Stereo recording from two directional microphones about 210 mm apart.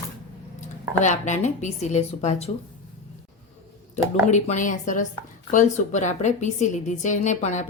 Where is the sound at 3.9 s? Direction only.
35° left (ahead or behind).